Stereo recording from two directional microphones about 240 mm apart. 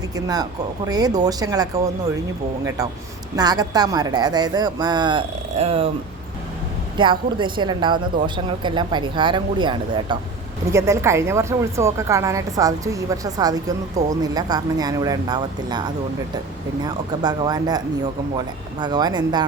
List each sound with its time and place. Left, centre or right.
0.9 s a woman's voice: centre
6.9 s a woman's voice: centre